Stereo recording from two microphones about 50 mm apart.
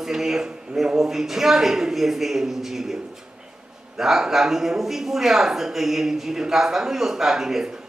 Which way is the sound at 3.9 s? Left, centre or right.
Centre.